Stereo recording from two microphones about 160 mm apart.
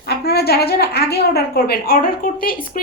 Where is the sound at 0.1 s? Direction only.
80° left.